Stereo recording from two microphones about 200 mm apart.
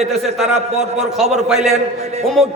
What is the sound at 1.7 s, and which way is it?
Speech, 30° right (ahead or behind).